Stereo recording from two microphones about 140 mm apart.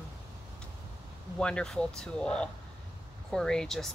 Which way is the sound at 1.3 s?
5° left (ahead or behind).